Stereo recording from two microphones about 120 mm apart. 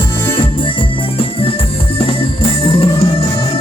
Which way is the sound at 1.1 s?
50° left (ahead or behind).